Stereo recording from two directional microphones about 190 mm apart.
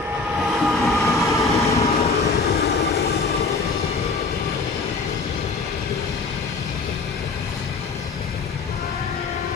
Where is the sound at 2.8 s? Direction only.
55° left (ahead or behind).